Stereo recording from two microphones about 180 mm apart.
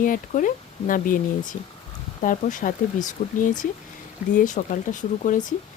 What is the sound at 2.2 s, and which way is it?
Speech, 45° left (ahead or behind).